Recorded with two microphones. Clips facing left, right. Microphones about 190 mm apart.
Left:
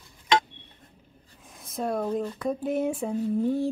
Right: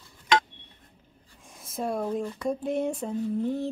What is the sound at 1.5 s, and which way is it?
Speech, centre (ahead or behind).